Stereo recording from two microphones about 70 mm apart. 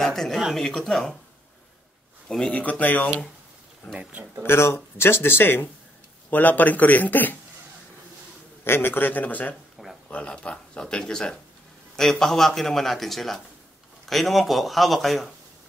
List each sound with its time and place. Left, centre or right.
0.0 s speech: centre
0.7 s speech: centre
2.2 s speech: centre
4.4 s speech: left
8.6 s speech: left; by 15.3 s centre